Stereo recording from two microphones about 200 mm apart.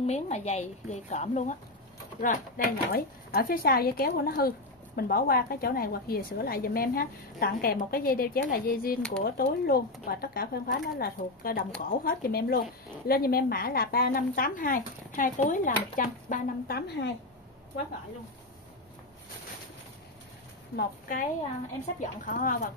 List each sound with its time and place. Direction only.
0.0 s a woman's voice: 35° left (ahead or behind); by 17.1 s 55° left (ahead or behind)
20.7 s speech: 45° left (ahead or behind)